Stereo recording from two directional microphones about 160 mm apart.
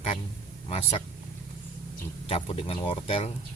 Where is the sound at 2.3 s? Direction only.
35° left (ahead or behind).